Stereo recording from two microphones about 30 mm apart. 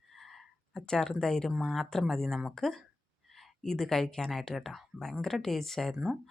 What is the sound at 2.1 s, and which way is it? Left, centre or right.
A woman's voice, centre.